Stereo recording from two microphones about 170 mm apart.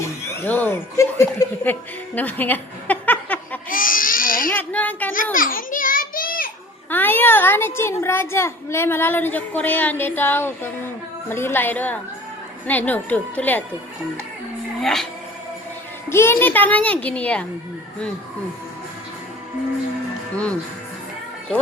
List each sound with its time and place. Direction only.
0.0 s speech: 15° left (ahead or behind)
2.1 s a sound: 10° left (ahead or behind)
3.7 s crying: 55° left (ahead or behind)
4.5 s a woman's voice: 10° left (ahead or behind)
5.1 s children playing: 55° left (ahead or behind)
6.9 s a woman's voice: 10° left (ahead or behind)
14.8 s speech: centre (ahead or behind)
16.0 s a woman's voice: 15° left (ahead or behind)
20.3 s speech: 5° left (ahead or behind)